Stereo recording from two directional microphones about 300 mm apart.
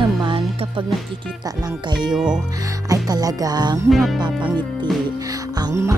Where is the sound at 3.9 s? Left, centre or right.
Centre.